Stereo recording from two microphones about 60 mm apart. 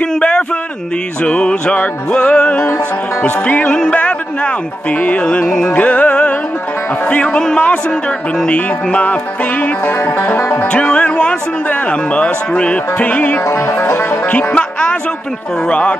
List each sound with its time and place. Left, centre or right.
0.0 s a sound: centre
1.2 s speech: centre
3.9 s music: left
7.1 s a man's voice: centre
10.0 s music: left
10.7 s speech: centre
13.5 s music: left
14.2 s speech: centre